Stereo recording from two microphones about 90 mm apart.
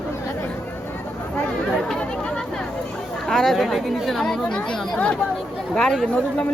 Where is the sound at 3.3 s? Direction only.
5° left (ahead or behind).